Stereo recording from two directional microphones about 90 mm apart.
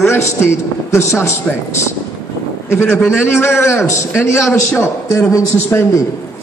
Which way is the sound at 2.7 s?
30° left (ahead or behind).